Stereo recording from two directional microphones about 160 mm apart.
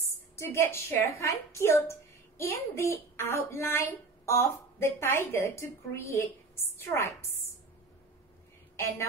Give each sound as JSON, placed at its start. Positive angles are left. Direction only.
{"t": 0.4, "sound": "a woman's voice", "side_deg": 15}
{"t": 8.7, "sound": "a woman's voice", "side_deg": 15}